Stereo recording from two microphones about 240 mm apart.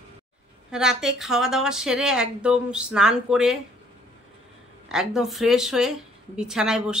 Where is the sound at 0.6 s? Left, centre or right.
Centre.